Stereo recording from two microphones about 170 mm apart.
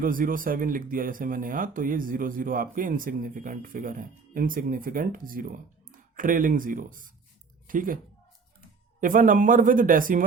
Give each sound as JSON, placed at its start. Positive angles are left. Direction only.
{"t": 0.0, "sound": "speech", "side_deg": -55}
{"t": 9.0, "sound": "speech", "side_deg": -50}